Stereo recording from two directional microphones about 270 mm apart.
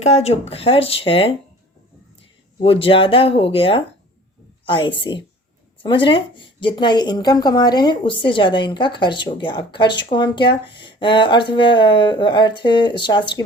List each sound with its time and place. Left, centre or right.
0.0 s speech: left
2.6 s a woman's voice: centre